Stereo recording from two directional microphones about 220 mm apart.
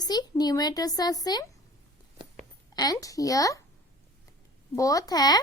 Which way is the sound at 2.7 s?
15° left (ahead or behind).